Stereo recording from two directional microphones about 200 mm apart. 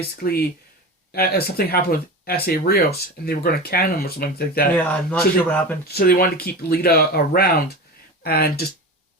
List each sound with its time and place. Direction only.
0.2 s speech: 50° left (ahead or behind)
4.7 s speech: 5° left (ahead or behind)
5.9 s speech: 50° left (ahead or behind)